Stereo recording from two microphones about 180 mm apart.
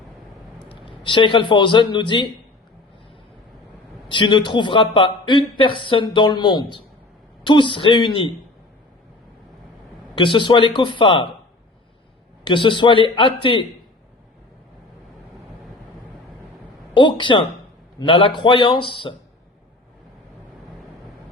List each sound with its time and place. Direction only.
0.6 s a man's voice: 25° left (ahead or behind)
4.1 s a man's voice: 25° left (ahead or behind)
10.2 s a man's voice: 25° left (ahead or behind)
12.5 s a man's voice: 25° left (ahead or behind)
16.9 s a man's voice: 25° left (ahead or behind)